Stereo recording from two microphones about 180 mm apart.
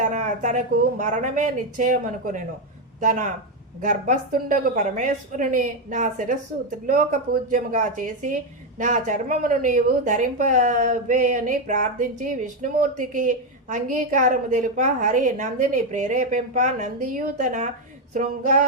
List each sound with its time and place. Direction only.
0.0 s a woman's voice: 45° right (ahead or behind)